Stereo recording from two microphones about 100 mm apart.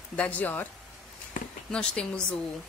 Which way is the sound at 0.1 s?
15° left (ahead or behind).